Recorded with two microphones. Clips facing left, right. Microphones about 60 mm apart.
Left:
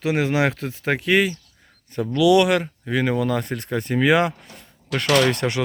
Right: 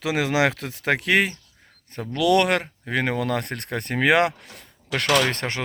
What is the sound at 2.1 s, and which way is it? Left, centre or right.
Speech, right.